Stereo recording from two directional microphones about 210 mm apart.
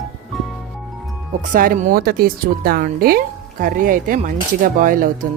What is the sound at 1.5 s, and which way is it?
Speech, 40° right (ahead or behind).